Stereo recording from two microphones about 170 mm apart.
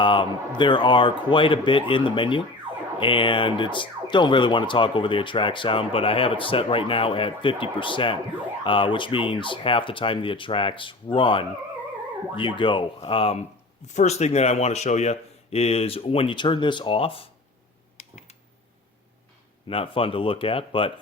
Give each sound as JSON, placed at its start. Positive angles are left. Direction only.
{"t": 0.0, "sound": "speech", "side_deg": 30}
{"t": 19.6, "sound": "speech", "side_deg": 30}